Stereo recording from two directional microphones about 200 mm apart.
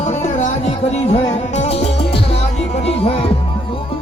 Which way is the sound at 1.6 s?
30° left (ahead or behind).